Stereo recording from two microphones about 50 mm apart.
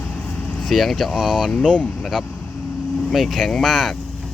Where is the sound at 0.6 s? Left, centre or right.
Centre.